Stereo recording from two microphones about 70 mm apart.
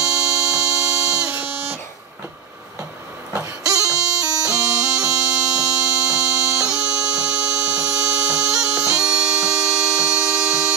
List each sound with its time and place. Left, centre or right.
0.0 s music: centre
1.3 s a sound: right
3.3 s music: right
4.2 s bagpipes: right
4.6 s music: right
8.5 s bagpipes: centre